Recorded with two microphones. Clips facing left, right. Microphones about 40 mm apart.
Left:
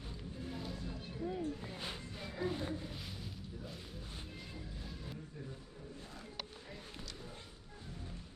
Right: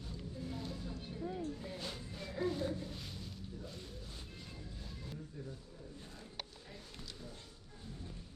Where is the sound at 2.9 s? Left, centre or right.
Centre.